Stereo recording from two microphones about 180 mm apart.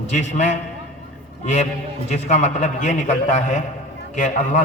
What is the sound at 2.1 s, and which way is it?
A man's voice, 40° left (ahead or behind).